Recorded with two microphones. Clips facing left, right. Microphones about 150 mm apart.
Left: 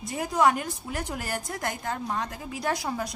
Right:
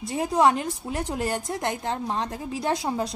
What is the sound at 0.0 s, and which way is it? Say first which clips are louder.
A woman's voice: right 3 dB; 30° right (ahead or behind).